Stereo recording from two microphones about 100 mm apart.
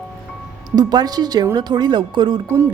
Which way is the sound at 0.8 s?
40° right (ahead or behind).